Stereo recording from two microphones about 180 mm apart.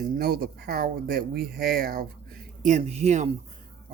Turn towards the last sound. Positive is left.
turn(degrees=-40)  # may be behind; listen again after turning